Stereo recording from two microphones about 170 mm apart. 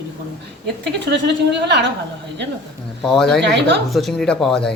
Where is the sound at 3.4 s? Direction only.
90° right.